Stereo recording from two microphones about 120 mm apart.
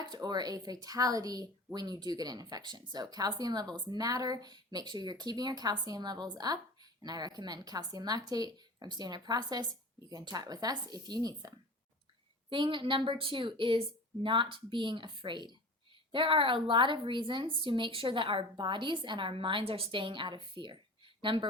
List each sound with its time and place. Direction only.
0.0 s speech: 35° right (ahead or behind)
12.5 s a woman's voice: 45° right (ahead or behind)